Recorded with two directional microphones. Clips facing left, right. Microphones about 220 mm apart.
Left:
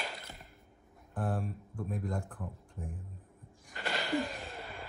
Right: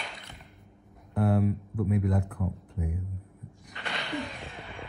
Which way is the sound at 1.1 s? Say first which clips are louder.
Right 10 dB; 75° right (ahead or behind).